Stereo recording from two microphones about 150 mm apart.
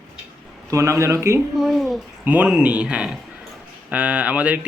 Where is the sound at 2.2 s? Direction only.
10° right (ahead or behind).